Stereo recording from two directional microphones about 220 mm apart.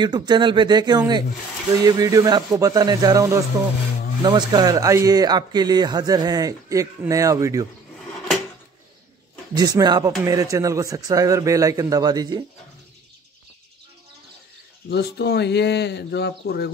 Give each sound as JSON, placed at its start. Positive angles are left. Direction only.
{"t": 0.0, "sound": "speech", "side_deg": -20}
{"t": 9.6, "sound": "speech", "side_deg": -15}
{"t": 14.9, "sound": "speech", "side_deg": 50}